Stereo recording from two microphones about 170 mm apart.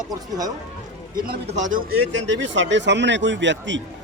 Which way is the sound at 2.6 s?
90° right.